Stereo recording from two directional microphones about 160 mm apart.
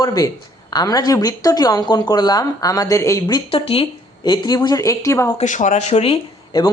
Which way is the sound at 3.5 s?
35° left (ahead or behind).